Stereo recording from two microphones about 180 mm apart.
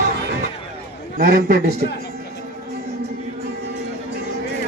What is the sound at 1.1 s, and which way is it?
Speech, 55° right (ahead or behind).